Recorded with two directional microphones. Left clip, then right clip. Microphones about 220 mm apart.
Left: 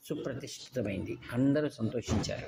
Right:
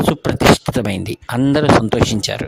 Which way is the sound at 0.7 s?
50° right (ahead or behind).